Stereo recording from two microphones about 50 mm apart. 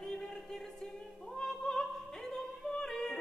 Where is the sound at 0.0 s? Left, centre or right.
Centre.